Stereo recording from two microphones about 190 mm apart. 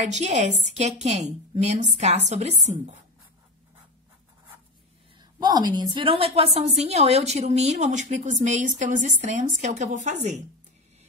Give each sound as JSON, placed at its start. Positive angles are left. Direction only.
{"t": 0.0, "sound": "a woman's voice", "side_deg": -35}
{"t": 5.4, "sound": "a woman's voice", "side_deg": -20}